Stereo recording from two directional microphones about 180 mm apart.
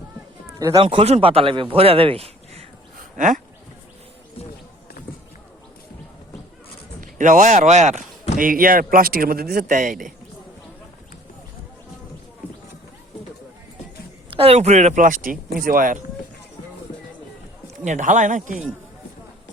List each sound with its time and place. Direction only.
0.4 s a sound: 20° right (ahead or behind)
0.8 s a man's voice: 30° right (ahead or behind)
3.0 s a sound: 45° right (ahead or behind)
7.0 s speech: 45° right (ahead or behind)
8.4 s speech: 50° right (ahead or behind)
14.3 s a man's voice: 30° right (ahead or behind); by 16.0 s 50° right (ahead or behind)
17.8 s speech: 45° right (ahead or behind)